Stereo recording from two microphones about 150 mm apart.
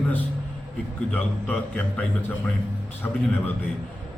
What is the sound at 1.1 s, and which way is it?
A man's voice, 10° left (ahead or behind).